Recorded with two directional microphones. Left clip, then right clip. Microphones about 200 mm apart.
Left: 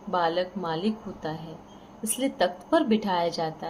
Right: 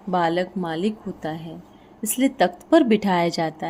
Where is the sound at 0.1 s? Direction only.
55° right (ahead or behind).